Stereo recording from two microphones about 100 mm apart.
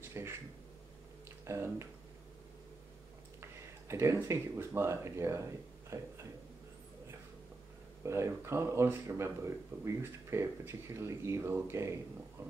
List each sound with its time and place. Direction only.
0.2 s speech: 25° right (ahead or behind)
1.4 s speech: 30° right (ahead or behind)
3.9 s speech: 25° right (ahead or behind)
8.0 s speech: 30° right (ahead or behind)